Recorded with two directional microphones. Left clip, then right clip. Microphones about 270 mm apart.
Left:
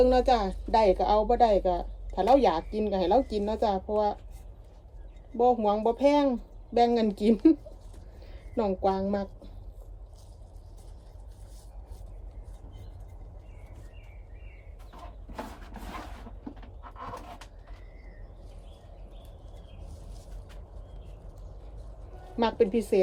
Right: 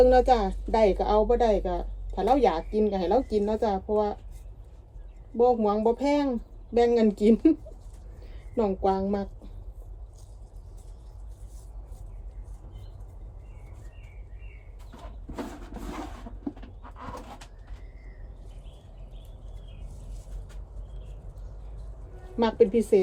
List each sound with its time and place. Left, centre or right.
0.0 s a woman's voice: centre
5.5 s a woman's voice: centre
8.5 s a woman's voice: centre
22.4 s speech: centre